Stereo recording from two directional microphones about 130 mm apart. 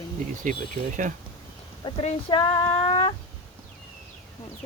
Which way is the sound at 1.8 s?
35° left (ahead or behind).